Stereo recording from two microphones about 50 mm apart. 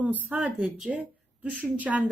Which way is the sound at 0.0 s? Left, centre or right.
Right.